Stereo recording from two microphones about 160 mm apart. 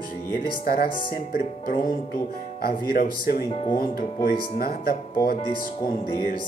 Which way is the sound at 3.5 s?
35° left (ahead or behind).